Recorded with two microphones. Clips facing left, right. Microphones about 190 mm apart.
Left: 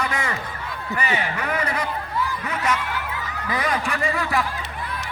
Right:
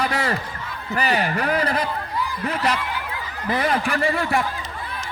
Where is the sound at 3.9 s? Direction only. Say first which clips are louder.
Right 2 dB; 30° right (ahead or behind).